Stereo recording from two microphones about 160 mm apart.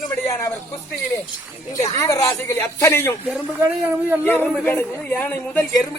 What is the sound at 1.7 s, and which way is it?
A man's voice, 20° left (ahead or behind).